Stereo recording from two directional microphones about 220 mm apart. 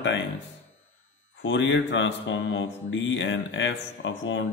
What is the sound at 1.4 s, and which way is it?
Speech, 55° left (ahead or behind).